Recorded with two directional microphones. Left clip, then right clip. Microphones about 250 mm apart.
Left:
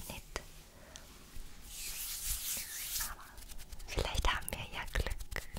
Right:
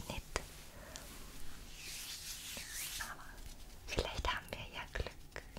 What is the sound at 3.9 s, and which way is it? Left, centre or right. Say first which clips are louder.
Whispering: left 3 dB; centre.